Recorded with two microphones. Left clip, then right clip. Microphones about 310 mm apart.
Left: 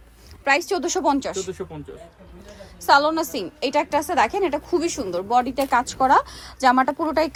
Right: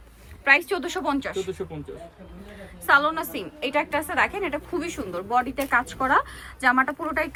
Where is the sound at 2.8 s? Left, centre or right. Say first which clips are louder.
Left 3 dB; centre.